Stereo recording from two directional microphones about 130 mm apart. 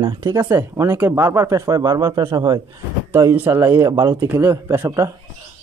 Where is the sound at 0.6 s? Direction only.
15° right (ahead or behind); by 2.6 s 30° right (ahead or behind).